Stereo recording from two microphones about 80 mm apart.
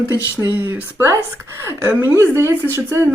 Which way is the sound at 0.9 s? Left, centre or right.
Right.